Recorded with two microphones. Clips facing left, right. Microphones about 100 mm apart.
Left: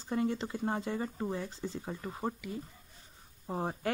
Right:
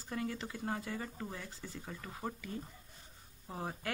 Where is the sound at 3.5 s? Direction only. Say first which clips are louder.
Left 6 dB; 25° left (ahead or behind).